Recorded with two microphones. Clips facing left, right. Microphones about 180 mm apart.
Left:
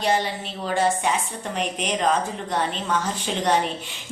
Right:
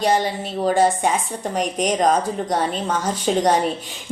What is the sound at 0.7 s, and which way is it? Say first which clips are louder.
A woman's voice: right 4 dB; 40° right (ahead or behind).